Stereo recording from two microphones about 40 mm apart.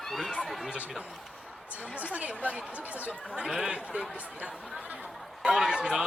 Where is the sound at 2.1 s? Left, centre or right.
Right.